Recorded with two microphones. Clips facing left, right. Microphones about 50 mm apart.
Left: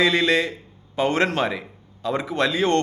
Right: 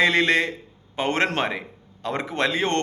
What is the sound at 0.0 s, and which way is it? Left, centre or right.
A man's voice, right.